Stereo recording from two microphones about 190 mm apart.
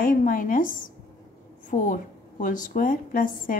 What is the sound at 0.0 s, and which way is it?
A woman's voice, 45° left (ahead or behind).